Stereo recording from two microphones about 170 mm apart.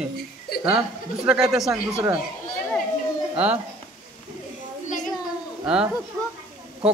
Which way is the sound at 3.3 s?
10° right (ahead or behind).